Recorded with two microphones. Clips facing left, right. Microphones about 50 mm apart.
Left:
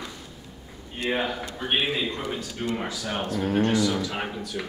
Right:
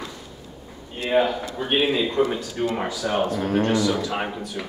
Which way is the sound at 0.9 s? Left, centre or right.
Centre.